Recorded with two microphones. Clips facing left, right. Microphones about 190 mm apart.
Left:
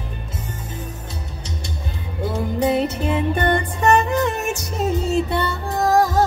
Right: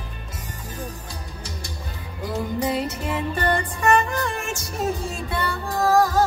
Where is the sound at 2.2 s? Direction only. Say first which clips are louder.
Left 4 dB; 25° left (ahead or behind).